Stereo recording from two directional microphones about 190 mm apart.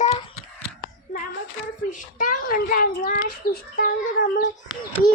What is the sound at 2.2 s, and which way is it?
A child's voice, 45° left (ahead or behind).